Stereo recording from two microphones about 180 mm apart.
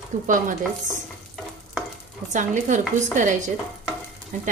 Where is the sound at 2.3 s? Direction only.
45° right (ahead or behind).